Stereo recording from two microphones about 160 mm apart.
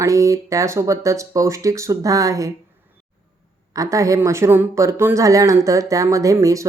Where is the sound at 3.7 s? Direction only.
20° right (ahead or behind).